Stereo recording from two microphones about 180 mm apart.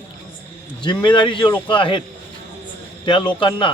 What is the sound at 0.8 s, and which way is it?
Speech, 25° left (ahead or behind).